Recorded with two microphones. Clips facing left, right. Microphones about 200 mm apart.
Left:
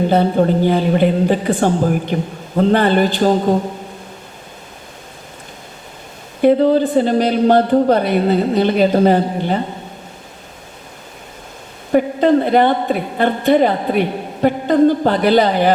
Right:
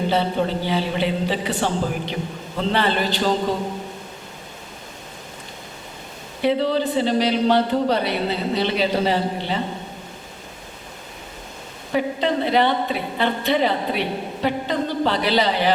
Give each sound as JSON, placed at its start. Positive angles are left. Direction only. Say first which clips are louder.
{"t": 0.1, "sound": "a woman's voice", "louder": "left 7 dB", "side_deg": 50}
{"t": 6.4, "sound": "a woman's voice", "louder": "left 8 dB", "side_deg": 50}
{"t": 11.9, "sound": "a woman's voice", "louder": "left 9 dB", "side_deg": 50}